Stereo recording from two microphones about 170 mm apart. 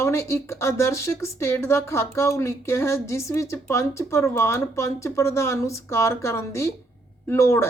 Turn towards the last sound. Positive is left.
turn(degrees=15)  # may be behind; listen again after turning